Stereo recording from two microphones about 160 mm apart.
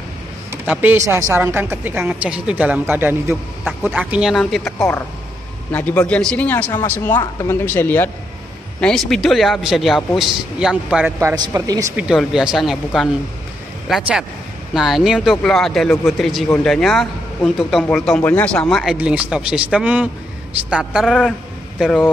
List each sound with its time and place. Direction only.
0.7 s a woman's voice: 10° right (ahead or behind)
4.6 s a man's voice: 15° left (ahead or behind)
7.1 s speech: 25° left (ahead or behind)
7.6 s a man's voice: 15° left (ahead or behind)
8.8 s speech: 5° left (ahead or behind)
11.1 s a man's voice: 20° right (ahead or behind)
12.0 s a man's voice: 5° right (ahead or behind)
18.9 s a woman's voice: 5° right (ahead or behind)